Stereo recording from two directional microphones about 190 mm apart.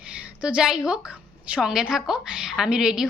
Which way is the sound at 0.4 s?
5° right (ahead or behind).